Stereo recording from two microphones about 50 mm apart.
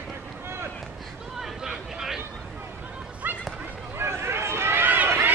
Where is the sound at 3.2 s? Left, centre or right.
Right.